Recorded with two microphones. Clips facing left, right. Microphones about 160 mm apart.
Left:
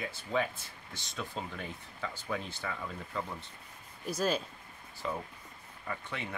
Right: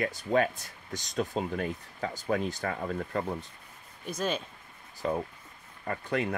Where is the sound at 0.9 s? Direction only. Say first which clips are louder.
Right 9 dB; 40° right (ahead or behind).